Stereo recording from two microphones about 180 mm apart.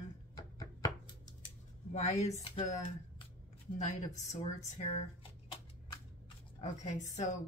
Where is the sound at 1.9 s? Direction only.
40° left (ahead or behind).